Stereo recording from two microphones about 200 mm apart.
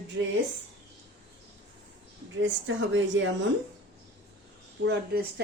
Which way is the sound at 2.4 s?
70° right (ahead or behind).